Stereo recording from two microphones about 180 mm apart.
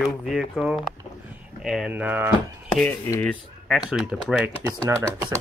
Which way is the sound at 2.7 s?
10° left (ahead or behind).